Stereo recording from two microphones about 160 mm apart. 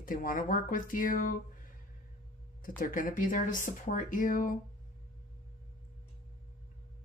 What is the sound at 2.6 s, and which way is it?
Speech, 60° left (ahead or behind).